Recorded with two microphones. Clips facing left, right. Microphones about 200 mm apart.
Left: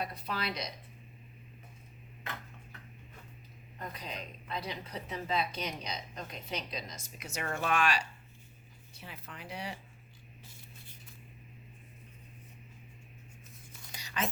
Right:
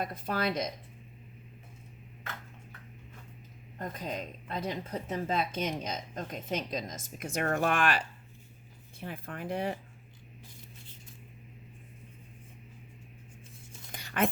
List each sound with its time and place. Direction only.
0.0 s speech: 50° right (ahead or behind)
3.8 s speech: 50° right (ahead or behind)
13.9 s whispering: 55° right (ahead or behind)